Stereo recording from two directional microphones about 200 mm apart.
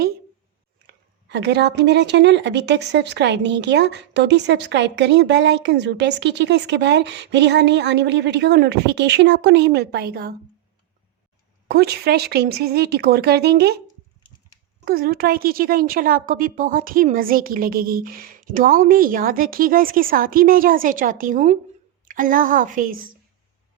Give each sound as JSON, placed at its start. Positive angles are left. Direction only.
{"t": 0.9, "sound": "speech", "side_deg": -60}
{"t": 11.7, "sound": "a woman's voice", "side_deg": -55}
{"t": 14.8, "sound": "a woman's voice", "side_deg": -45}